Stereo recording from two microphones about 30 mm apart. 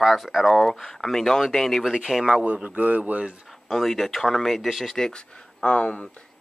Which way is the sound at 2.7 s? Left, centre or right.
Right.